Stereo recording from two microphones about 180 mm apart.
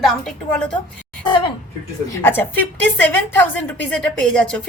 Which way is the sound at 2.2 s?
10° left (ahead or behind).